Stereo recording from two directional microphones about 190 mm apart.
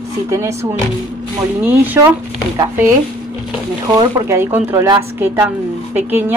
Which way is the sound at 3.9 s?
15° right (ahead or behind).